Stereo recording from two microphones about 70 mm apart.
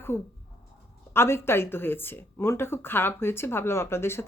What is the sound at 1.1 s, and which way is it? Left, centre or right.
A woman's voice, left.